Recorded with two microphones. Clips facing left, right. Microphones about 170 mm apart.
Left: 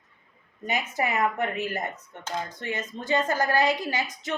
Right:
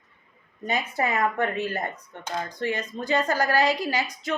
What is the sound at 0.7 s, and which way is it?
Speech, 15° left (ahead or behind).